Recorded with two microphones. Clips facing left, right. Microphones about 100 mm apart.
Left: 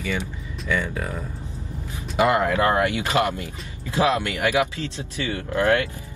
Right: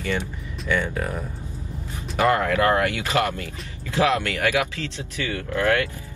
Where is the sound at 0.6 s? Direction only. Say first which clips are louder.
Right 1 dB; centre (ahead or behind).